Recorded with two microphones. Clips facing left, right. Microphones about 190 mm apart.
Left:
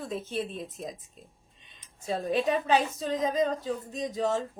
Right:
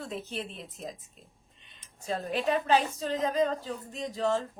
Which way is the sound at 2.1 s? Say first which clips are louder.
Left 2 dB; 15° left (ahead or behind).